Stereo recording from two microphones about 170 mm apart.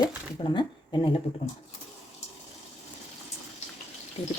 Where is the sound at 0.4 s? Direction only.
25° left (ahead or behind).